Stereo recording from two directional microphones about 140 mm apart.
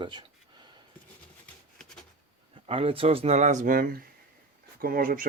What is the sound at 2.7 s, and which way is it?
Speech, 40° right (ahead or behind).